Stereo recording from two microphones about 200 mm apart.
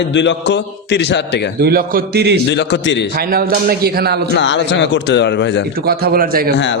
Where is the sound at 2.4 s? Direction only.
60° left (ahead or behind).